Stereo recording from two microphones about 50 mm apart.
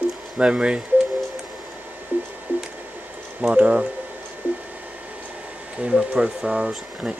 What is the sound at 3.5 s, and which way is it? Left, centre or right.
Speech, right.